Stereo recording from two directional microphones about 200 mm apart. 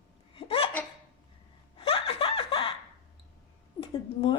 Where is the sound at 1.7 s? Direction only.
25° left (ahead or behind).